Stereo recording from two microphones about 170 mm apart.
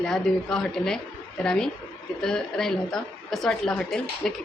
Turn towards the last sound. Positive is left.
turn(degrees=5)  # may be behind; listen again after turning